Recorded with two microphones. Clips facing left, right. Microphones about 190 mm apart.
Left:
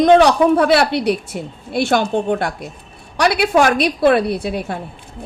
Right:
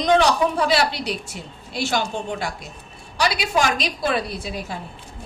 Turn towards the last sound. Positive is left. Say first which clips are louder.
# left 9 dB
turn(degrees=60)  # may be behind; listen again after turning